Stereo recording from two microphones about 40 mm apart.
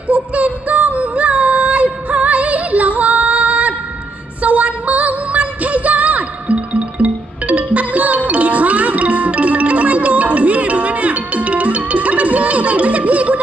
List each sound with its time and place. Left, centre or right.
0.1 s music: right